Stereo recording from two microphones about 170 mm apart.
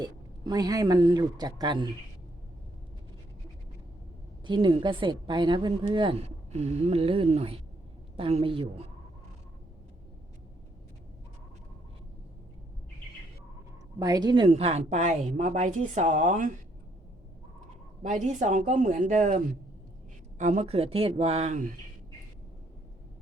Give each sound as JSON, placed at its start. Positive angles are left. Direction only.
{"t": 0.0, "sound": "a woman's voice", "side_deg": -25}
{"t": 4.4, "sound": "a woman's voice", "side_deg": -30}
{"t": 14.0, "sound": "a woman's voice", "side_deg": -25}
{"t": 18.0, "sound": "speech", "side_deg": -45}
{"t": 20.4, "sound": "a woman's voice", "side_deg": -45}